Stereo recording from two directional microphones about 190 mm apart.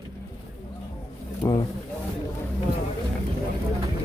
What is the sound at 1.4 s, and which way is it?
Speech, 20° left (ahead or behind).